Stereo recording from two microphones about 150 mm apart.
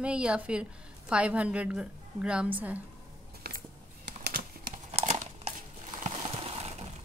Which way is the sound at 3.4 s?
90° right.